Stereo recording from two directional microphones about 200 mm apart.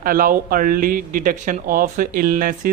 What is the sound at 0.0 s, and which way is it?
Speech, 45° right (ahead or behind).